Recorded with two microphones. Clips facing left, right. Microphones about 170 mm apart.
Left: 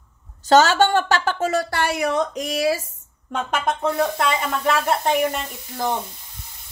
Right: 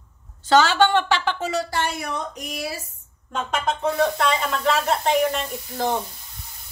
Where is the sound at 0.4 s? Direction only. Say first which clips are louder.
Left 2 dB; 45° left (ahead or behind); by 2.8 s 90° left.